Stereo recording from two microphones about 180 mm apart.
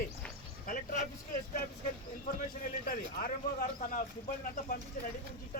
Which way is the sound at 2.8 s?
50° left (ahead or behind).